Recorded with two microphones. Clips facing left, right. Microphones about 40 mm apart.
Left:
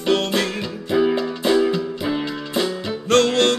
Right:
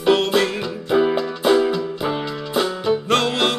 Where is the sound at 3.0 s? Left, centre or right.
Centre.